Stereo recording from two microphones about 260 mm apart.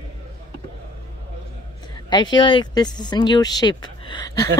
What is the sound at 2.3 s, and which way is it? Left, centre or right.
Speech, centre.